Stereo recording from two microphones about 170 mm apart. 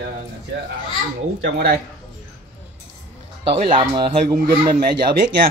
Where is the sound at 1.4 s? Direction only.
70° right (ahead or behind).